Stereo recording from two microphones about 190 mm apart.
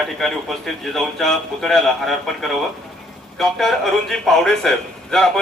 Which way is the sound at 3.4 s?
Centre (ahead or behind).